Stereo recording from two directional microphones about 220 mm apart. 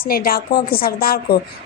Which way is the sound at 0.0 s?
40° left (ahead or behind).